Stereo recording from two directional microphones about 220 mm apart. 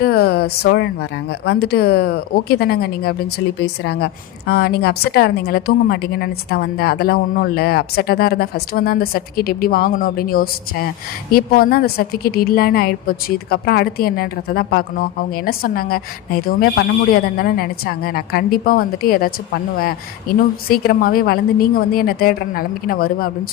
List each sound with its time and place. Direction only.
0.0 s a woman's voice: 45° left (ahead or behind)